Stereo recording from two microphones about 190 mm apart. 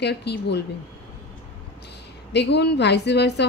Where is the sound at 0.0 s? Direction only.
60° left (ahead or behind).